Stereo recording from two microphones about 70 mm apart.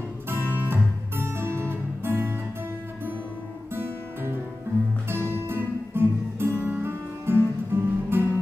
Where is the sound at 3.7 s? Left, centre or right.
Right.